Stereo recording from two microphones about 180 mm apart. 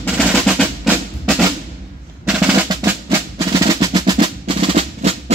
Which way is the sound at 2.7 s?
15° right (ahead or behind).